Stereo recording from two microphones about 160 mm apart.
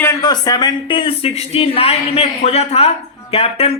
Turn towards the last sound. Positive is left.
turn(degrees=40)  # may be behind; listen again after turning